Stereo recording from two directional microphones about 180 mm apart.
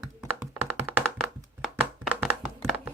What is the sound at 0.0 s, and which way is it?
Computer keyboard, 5° right (ahead or behind).